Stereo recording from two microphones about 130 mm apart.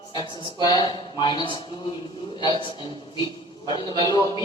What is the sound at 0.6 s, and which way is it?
Speech, 35° left (ahead or behind).